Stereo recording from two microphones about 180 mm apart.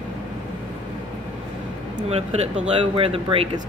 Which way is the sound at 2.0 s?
35° right (ahead or behind).